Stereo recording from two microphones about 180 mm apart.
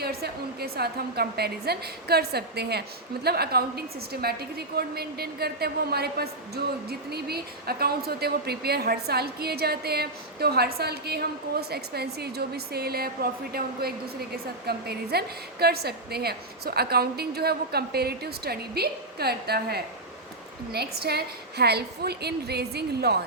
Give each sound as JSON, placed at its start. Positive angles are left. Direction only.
{"t": 0.0, "sound": "a woman's voice", "side_deg": -60}